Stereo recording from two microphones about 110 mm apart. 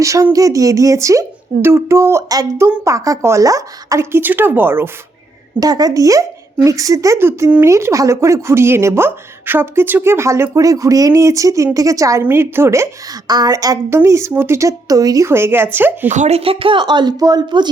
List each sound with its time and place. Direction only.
0.0 s speech: 30° right (ahead or behind)
4.2 s speech: 20° right (ahead or behind)
5.5 s a woman's voice: 35° right (ahead or behind)
13.2 s a woman's voice: 35° right (ahead or behind); by 16.0 s 20° right (ahead or behind)
16.0 s speech: 90° right; by 17.7 s 40° right (ahead or behind)